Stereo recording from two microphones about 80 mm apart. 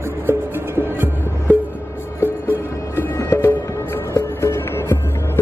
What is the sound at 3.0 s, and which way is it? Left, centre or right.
Music, left.